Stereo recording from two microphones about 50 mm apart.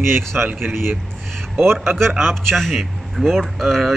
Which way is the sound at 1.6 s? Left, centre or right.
Right.